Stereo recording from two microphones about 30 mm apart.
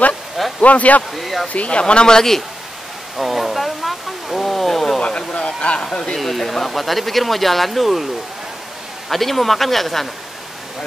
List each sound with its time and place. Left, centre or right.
0.6 s speech: left
1.1 s speech: centre
1.5 s speech: left
2.0 s a man's voice: left
3.2 s pink noise: centre
3.6 s a sound: centre
5.0 s a sound: left
6.1 s speech: centre
9.1 s speech: centre